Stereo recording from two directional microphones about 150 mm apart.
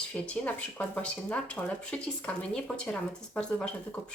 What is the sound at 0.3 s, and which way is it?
Speech, 10° left (ahead or behind).